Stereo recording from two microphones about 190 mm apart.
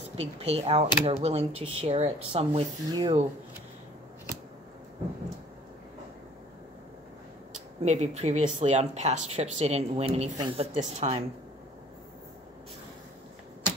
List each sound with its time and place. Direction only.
0.2 s speech: 35° right (ahead or behind)
7.8 s speech: 35° right (ahead or behind)